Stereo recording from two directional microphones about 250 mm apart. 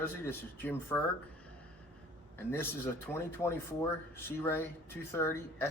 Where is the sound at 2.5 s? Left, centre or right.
Centre.